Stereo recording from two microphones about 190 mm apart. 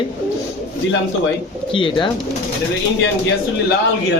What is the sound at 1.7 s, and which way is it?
Speech, 25° left (ahead or behind).